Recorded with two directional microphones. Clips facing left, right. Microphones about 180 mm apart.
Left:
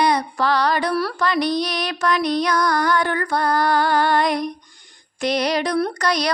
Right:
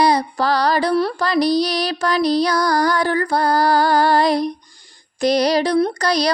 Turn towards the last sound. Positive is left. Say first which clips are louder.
# right 4 dB
turn(degrees=-25)  # may be behind; listen again after turning